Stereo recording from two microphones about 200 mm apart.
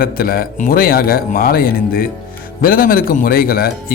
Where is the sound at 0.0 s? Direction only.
45° left (ahead or behind).